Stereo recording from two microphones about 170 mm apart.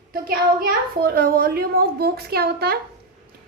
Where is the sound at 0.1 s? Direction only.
60° right (ahead or behind).